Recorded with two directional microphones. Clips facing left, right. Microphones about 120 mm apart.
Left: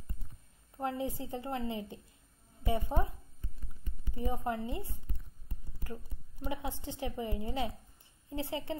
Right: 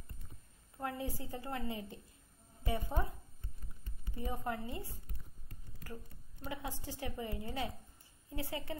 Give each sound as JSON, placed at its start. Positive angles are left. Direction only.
{"t": 0.7, "sound": "a woman's voice", "side_deg": 20}
{"t": 4.1, "sound": "a woman's voice", "side_deg": 25}
{"t": 6.4, "sound": "a woman's voice", "side_deg": 20}